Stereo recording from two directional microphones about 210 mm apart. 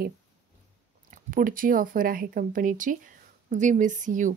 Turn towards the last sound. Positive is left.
turn(degrees=-35)  # may be behind; listen again after turning